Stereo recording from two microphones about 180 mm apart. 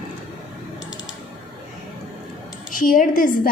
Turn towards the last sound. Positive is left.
turn(degrees=45)  # may be behind; listen again after turning